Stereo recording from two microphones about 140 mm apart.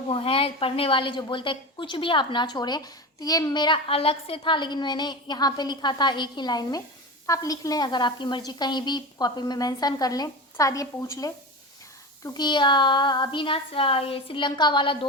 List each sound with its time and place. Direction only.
0.1 s a woman's voice: 40° left (ahead or behind)